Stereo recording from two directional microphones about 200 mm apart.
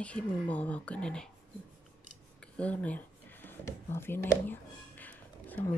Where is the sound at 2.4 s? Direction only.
5° left (ahead or behind).